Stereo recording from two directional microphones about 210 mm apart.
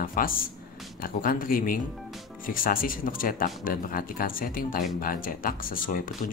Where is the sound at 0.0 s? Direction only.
40° left (ahead or behind).